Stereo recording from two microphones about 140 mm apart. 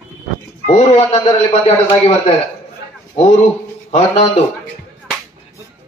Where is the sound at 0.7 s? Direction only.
45° left (ahead or behind).